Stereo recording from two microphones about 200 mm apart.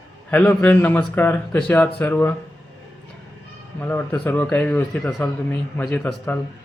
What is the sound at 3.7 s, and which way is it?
Speech, 10° left (ahead or behind).